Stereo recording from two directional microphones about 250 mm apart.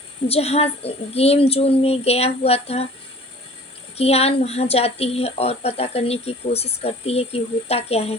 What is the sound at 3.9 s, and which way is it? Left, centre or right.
Speech, left.